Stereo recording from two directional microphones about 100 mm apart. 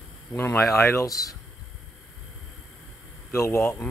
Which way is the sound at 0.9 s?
35° left (ahead or behind).